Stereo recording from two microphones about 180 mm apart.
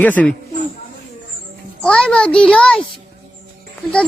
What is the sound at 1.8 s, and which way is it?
A child's voice, 5° left (ahead or behind).